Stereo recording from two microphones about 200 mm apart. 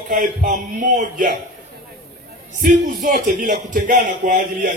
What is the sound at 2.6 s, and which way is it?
Speech, 40° right (ahead or behind).